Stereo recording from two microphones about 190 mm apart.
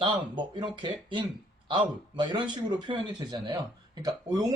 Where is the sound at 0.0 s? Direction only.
25° right (ahead or behind).